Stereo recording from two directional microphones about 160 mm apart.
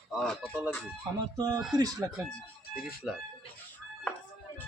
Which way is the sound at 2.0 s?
15° right (ahead or behind).